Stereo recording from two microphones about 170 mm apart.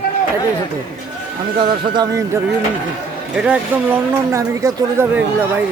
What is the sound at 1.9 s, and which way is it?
Speech, 25° right (ahead or behind).